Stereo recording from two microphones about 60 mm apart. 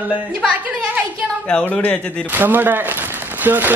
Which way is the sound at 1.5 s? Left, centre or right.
Centre.